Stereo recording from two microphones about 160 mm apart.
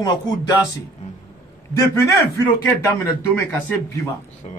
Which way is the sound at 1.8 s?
20° left (ahead or behind).